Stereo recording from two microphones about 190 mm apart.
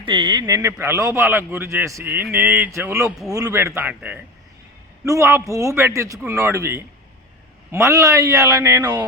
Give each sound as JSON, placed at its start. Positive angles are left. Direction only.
{"t": 0.0, "sound": "speech", "side_deg": -25}